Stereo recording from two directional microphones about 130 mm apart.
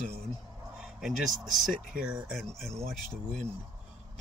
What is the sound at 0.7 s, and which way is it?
Speech, 5° right (ahead or behind).